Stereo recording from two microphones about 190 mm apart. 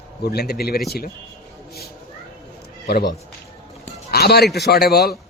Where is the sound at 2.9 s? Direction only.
55° left (ahead or behind).